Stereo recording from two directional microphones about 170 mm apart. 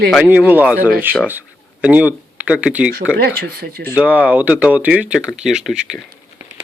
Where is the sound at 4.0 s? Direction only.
5° right (ahead or behind).